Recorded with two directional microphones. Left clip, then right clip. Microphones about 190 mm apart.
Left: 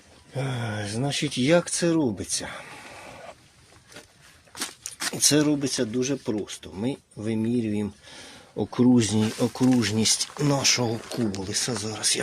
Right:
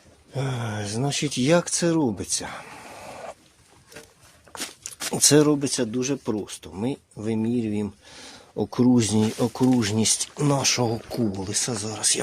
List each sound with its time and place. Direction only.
0.3 s speech: 15° right (ahead or behind)
4.8 s speech: 30° right (ahead or behind); by 12.2 s 10° right (ahead or behind)